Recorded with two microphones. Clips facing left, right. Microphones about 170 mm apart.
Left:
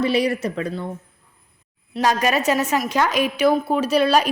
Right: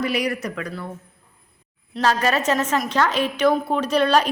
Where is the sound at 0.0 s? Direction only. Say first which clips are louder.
Left 4 dB; 30° left (ahead or behind).